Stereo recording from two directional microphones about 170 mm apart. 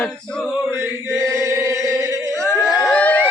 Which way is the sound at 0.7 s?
15° right (ahead or behind).